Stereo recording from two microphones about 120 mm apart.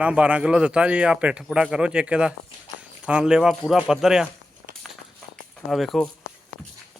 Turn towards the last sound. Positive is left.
turn(degrees=0)  # may be behind; listen again after turning